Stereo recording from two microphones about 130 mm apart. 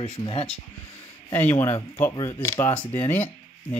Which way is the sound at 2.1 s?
30° left (ahead or behind).